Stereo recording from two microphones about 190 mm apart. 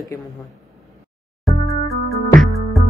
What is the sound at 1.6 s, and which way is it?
Music, 30° left (ahead or behind).